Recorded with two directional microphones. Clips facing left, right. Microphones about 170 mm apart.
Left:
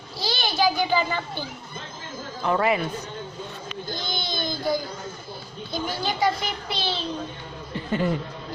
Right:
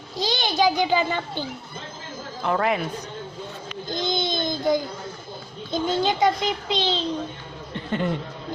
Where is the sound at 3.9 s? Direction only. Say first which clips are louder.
Right 7 dB; 20° right (ahead or behind).